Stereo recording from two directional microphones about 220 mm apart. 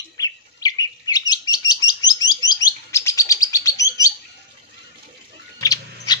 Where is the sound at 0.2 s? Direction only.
15° left (ahead or behind).